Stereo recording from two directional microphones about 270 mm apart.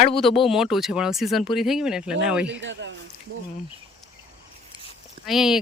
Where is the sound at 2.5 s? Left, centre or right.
Right.